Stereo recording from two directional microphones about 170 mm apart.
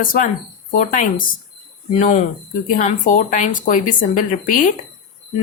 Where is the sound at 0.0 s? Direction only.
55° left (ahead or behind).